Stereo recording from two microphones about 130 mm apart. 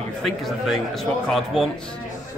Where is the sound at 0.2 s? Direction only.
Centre (ahead or behind).